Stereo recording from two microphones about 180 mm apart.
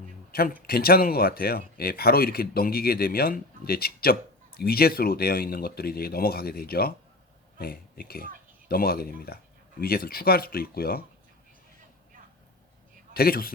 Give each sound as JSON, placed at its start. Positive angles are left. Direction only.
{"t": 0.3, "sound": "a man's voice", "side_deg": 55}
{"t": 13.1, "sound": "speech", "side_deg": 55}